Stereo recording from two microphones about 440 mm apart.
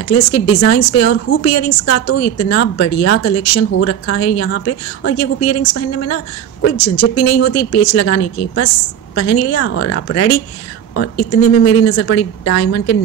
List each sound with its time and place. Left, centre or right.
0.0 s speech: left